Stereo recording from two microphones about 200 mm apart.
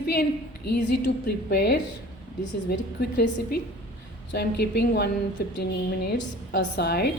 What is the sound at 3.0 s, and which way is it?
A woman's voice, 55° left (ahead or behind).